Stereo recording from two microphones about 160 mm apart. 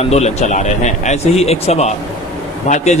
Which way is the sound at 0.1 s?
45° left (ahead or behind).